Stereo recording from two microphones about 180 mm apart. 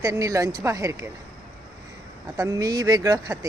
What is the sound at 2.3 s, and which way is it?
Speech, 20° right (ahead or behind).